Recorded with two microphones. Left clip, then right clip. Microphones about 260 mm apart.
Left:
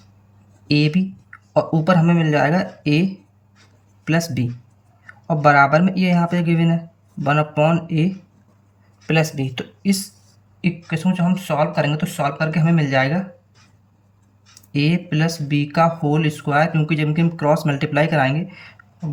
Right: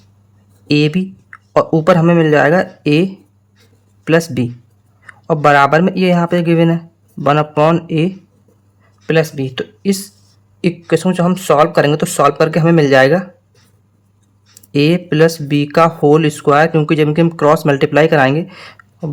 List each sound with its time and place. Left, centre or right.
0.7 s speech: centre
14.7 s speech: centre